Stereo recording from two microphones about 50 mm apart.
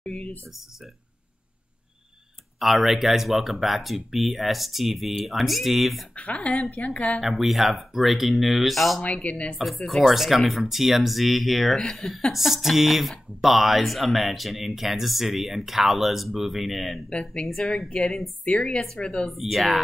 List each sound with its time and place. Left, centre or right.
0.0 s a sound: left
2.6 s speech: centre
6.1 s speech: left
6.5 s speech: centre
6.8 s speech: left
7.2 s speech: centre
9.0 s speech: left
9.8 s speech: centre
17.1 s speech: centre
17.5 s speech: centre
18.4 s speech: left
19.2 s speech: centre